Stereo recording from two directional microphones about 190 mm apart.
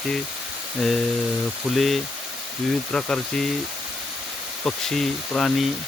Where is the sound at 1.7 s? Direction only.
Centre (ahead or behind).